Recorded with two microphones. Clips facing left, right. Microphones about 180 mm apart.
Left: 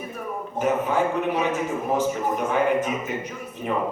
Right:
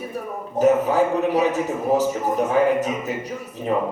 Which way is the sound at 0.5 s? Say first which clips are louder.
Right 6 dB; 40° right (ahead or behind).